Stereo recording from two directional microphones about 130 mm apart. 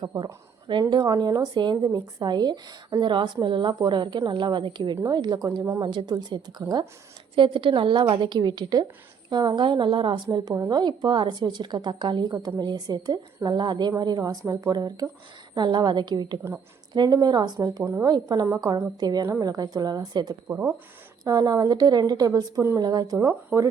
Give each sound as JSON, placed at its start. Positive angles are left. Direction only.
{"t": 0.0, "sound": "a woman's voice", "side_deg": -35}
{"t": 5.8, "sound": "a woman's voice", "side_deg": -35}
{"t": 17.8, "sound": "a woman's voice", "side_deg": -20}
{"t": 18.1, "sound": "a woman's voice", "side_deg": -30}
{"t": 20.5, "sound": "speech", "side_deg": -15}
{"t": 21.2, "sound": "a woman's voice", "side_deg": -30}